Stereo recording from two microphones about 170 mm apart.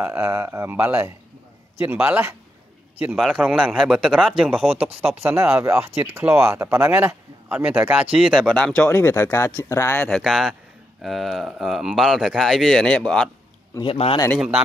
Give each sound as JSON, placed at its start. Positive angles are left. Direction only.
{"t": 0.0, "sound": "speech", "side_deg": -15}
{"t": 5.2, "sound": "speech", "side_deg": -15}
{"t": 10.0, "sound": "speech", "side_deg": 0}
{"t": 13.7, "sound": "a man's voice", "side_deg": 30}